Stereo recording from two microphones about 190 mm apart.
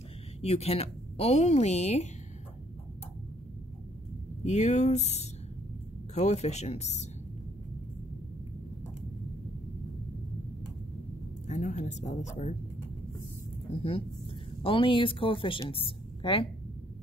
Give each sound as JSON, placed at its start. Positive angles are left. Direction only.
{"t": 0.4, "sound": "speech", "side_deg": 35}
{"t": 4.4, "sound": "speech", "side_deg": 35}
{"t": 11.4, "sound": "speech", "side_deg": 35}
{"t": 14.6, "sound": "a woman's voice", "side_deg": 30}